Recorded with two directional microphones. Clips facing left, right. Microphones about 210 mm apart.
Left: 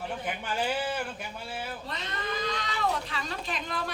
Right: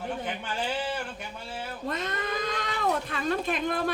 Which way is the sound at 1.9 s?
50° right (ahead or behind).